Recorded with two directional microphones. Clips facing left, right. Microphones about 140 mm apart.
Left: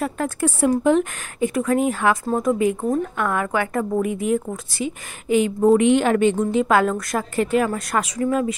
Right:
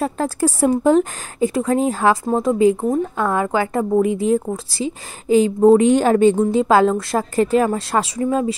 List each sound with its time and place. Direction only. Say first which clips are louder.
0.0 s speech: right 3 dB; 35° right (ahead or behind)